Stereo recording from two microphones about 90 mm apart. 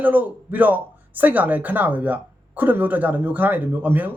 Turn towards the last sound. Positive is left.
turn(degrees=-20)  # may be behind; listen again after turning